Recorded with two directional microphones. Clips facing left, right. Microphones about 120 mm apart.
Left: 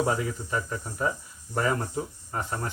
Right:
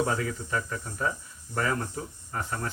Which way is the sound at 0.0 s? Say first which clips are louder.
Left 1 dB; 15° left (ahead or behind).